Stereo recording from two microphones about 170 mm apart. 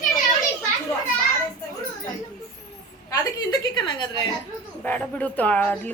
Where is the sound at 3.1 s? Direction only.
25° left (ahead or behind).